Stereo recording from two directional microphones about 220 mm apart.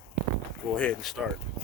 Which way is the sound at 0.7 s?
5° left (ahead or behind).